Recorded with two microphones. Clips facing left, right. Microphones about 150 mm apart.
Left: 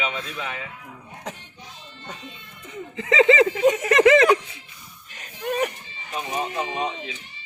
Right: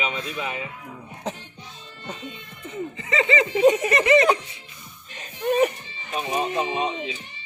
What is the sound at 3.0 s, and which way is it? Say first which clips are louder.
Speech: left 6 dB; 90° left.